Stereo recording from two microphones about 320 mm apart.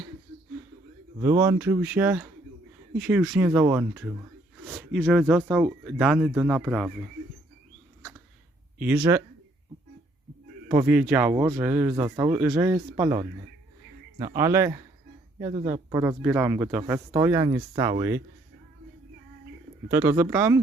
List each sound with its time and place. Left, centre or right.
1.2 s speech: centre
8.8 s speech: centre
10.7 s speech: centre
19.9 s speech: centre